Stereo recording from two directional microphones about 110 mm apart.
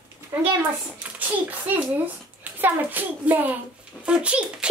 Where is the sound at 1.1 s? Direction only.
15° right (ahead or behind).